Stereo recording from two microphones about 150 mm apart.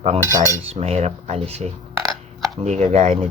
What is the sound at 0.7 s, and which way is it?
Speech, 45° right (ahead or behind).